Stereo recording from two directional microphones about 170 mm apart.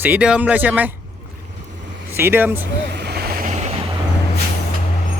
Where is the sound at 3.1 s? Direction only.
65° right (ahead or behind).